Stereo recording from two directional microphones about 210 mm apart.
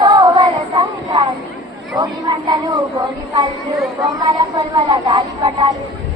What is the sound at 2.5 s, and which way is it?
Speech, 20° right (ahead or behind).